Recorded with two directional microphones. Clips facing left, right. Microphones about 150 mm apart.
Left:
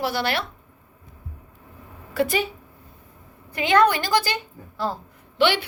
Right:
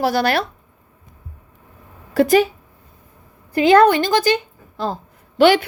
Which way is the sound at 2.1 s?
40° right (ahead or behind).